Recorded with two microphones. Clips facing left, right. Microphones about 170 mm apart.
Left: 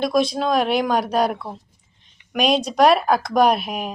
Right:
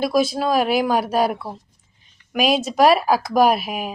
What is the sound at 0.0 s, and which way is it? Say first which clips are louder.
Speech: even; 5° right (ahead or behind).